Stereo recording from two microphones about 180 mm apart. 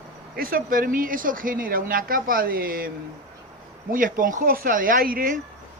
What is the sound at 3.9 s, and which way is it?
A woman's voice, 50° right (ahead or behind).